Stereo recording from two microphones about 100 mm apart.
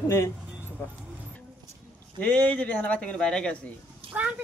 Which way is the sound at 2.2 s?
15° left (ahead or behind).